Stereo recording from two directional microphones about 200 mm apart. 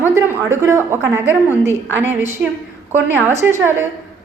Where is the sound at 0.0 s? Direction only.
10° right (ahead or behind).